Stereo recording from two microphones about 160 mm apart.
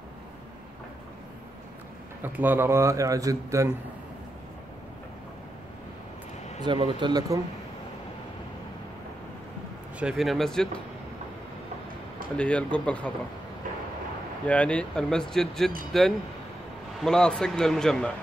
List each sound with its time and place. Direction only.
2.2 s a man's voice: 10° right (ahead or behind)
6.6 s speech: 30° right (ahead or behind)
9.9 s speech: 5° right (ahead or behind)
12.4 s speech: 5° left (ahead or behind)
14.4 s speech: 10° left (ahead or behind)